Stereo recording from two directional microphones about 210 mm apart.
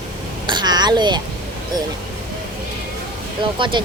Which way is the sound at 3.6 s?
25° right (ahead or behind).